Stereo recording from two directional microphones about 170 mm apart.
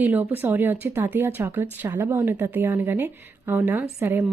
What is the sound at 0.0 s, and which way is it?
Speech, 10° right (ahead or behind).